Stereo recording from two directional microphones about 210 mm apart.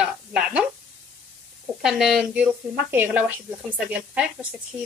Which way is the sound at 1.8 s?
Centre (ahead or behind).